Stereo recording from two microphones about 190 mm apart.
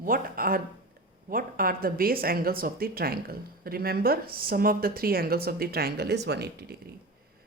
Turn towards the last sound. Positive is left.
turn(degrees=-55)  # may be behind; listen again after turning